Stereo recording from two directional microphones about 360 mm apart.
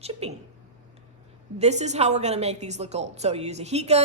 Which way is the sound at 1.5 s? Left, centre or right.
Centre.